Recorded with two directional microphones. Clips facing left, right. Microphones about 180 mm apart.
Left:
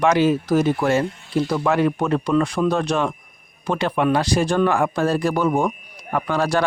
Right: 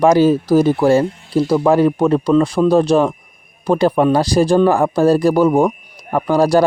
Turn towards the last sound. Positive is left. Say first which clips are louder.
# right 7 dB
turn(degrees=-35)  # may be behind; listen again after turning